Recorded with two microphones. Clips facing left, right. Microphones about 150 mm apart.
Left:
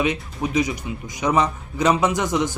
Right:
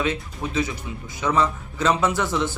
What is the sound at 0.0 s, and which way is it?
Speech, 15° left (ahead or behind).